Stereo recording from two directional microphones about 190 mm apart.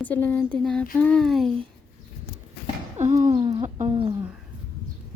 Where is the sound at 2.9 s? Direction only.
40° right (ahead or behind).